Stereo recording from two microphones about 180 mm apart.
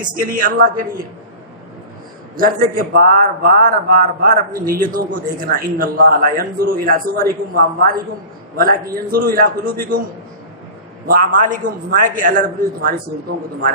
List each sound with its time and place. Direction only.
0.0 s a man's voice: 50° right (ahead or behind)
2.3 s a man's voice: 55° right (ahead or behind)
11.0 s a man's voice: 50° right (ahead or behind)